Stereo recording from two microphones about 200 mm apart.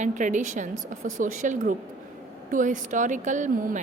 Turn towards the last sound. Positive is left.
turn(degrees=-40)  # may be behind; listen again after turning